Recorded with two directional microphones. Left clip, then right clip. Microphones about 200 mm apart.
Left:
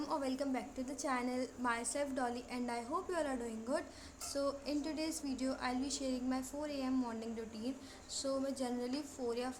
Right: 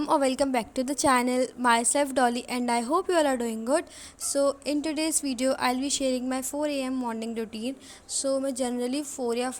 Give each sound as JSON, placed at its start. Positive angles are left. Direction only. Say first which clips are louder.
{"t": 0.0, "sound": "a woman's voice", "louder": "right 15 dB", "side_deg": -40}